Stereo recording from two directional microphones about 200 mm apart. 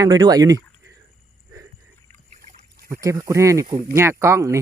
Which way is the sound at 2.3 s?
40° right (ahead or behind).